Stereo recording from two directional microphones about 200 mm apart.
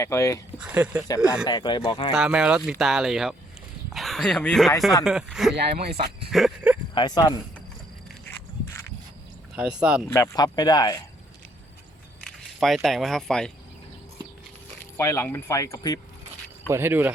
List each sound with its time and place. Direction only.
0.0 s speech: 15° left (ahead or behind)
0.6 s speech: 10° right (ahead or behind)
1.5 s speech: 20° left (ahead or behind)
2.1 s speech: 5° right (ahead or behind)
5.8 s speech: 50° right (ahead or behind)
6.3 s speech: centre (ahead or behind)
6.9 s speech: 20° left (ahead or behind)
9.6 s speech: 5° right (ahead or behind)
10.1 s speech: 15° left (ahead or behind)
12.2 s speech: centre (ahead or behind)
14.8 s speech: 15° left (ahead or behind)
16.6 s speech: 10° right (ahead or behind)